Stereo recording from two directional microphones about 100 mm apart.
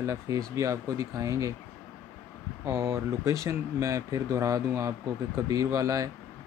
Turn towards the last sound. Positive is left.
turn(degrees=-35)  # may be behind; listen again after turning